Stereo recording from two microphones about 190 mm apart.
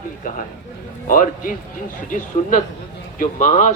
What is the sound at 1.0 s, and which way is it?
Speech, 45° left (ahead or behind).